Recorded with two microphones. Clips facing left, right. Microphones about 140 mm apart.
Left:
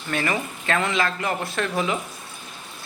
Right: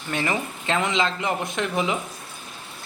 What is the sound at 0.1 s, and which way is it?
Speech, 20° right (ahead or behind).